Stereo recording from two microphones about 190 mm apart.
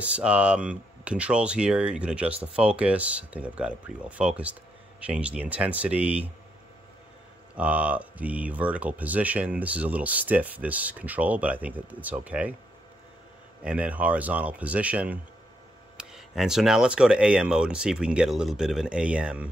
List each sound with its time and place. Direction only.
0.0 s speech: 5° right (ahead or behind)
7.5 s speech: 5° right (ahead or behind)
13.7 s speech: 5° right (ahead or behind)